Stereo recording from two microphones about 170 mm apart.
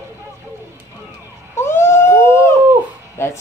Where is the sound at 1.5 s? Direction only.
15° left (ahead or behind).